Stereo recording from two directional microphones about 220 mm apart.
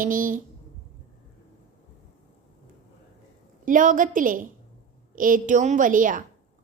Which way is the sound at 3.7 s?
35° right (ahead or behind).